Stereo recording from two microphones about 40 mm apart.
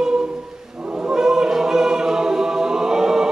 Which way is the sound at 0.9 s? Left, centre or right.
Centre.